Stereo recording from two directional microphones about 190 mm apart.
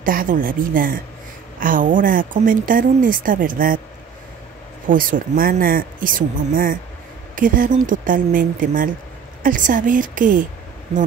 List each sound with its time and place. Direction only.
0.0 s speech: 45° right (ahead or behind)
4.8 s speech: 45° right (ahead or behind)